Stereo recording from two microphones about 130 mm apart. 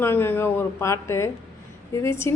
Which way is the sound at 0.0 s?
15° left (ahead or behind).